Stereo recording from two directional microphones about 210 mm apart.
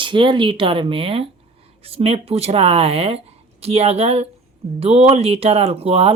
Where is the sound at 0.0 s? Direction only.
25° right (ahead or behind).